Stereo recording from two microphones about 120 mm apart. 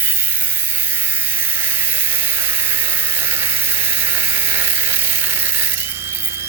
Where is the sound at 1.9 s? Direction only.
20° right (ahead or behind).